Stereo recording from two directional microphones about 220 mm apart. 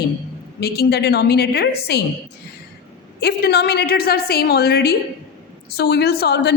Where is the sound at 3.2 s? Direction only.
50° left (ahead or behind).